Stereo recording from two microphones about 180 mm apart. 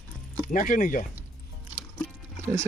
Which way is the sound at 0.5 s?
45° left (ahead or behind).